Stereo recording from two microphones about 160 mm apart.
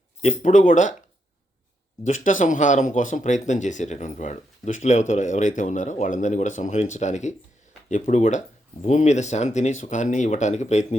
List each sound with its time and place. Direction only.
0.2 s speech: 50° left (ahead or behind)
2.0 s speech: 50° left (ahead or behind)